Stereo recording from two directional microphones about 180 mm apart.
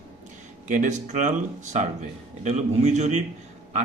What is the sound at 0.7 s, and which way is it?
Speech, 45° right (ahead or behind).